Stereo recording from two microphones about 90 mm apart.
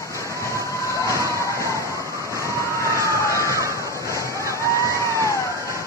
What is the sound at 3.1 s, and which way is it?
Emergency vehicle, 35° left (ahead or behind).